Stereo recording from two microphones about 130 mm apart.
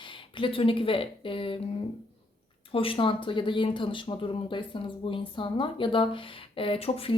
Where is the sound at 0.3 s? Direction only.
45° left (ahead or behind).